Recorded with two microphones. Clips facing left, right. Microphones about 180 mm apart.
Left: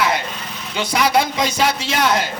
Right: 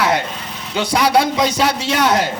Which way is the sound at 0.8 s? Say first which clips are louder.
Right 2 dB; 35° right (ahead or behind).